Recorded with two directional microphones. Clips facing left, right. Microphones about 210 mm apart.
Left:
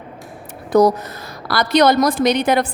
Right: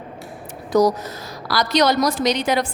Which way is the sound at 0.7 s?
55° left (ahead or behind).